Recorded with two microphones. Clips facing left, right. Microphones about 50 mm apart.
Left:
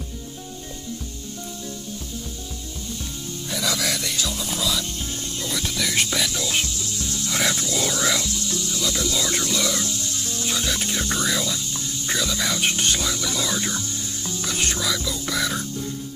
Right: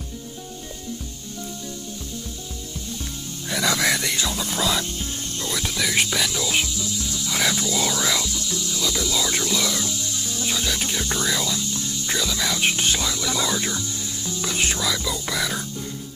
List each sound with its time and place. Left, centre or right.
3.7 s music: right
5.4 s music: centre